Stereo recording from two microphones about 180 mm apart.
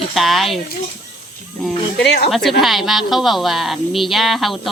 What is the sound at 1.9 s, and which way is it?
Speech, 70° left (ahead or behind).